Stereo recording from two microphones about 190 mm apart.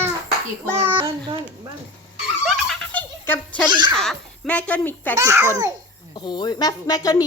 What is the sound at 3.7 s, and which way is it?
Speech, 20° right (ahead or behind).